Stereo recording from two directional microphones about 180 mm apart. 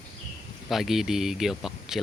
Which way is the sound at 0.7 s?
Centre (ahead or behind).